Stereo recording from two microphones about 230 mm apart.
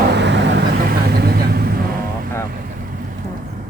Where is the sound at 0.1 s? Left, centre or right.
Right.